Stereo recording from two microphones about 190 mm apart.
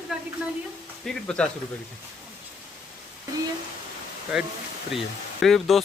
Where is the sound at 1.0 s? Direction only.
5° left (ahead or behind).